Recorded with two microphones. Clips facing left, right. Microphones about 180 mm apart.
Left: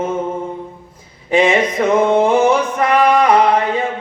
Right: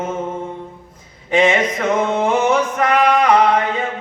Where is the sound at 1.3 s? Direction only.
30° left (ahead or behind).